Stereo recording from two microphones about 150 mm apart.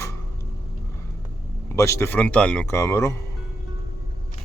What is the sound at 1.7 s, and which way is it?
Speech, 20° left (ahead or behind).